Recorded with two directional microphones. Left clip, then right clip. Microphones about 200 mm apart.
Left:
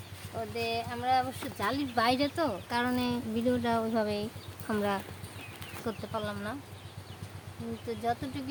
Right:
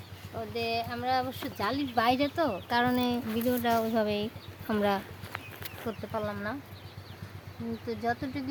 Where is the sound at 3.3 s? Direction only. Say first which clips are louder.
Right 1 dB; 5° left (ahead or behind).